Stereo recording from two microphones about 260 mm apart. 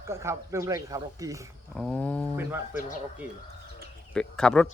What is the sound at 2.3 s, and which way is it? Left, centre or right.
Speech, centre.